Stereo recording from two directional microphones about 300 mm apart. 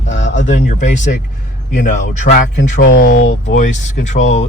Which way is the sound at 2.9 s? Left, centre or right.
Left.